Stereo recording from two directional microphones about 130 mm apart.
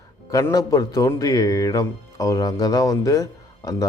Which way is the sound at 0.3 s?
25° left (ahead or behind).